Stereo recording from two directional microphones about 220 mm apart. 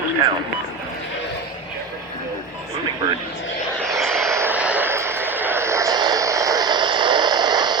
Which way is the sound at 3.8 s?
Centre (ahead or behind).